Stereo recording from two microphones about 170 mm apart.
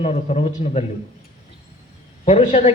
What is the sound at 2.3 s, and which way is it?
Speech, 40° left (ahead or behind).